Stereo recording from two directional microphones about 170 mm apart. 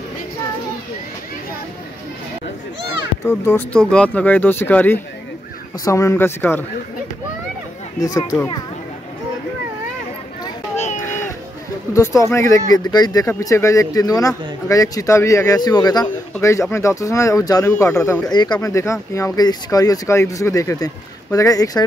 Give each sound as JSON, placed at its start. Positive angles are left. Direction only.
{"t": 3.3, "sound": "speech", "side_deg": 10}
{"t": 8.0, "sound": "speech", "side_deg": 20}
{"t": 11.0, "sound": "a sound", "side_deg": 10}
{"t": 11.9, "sound": "speech", "side_deg": 20}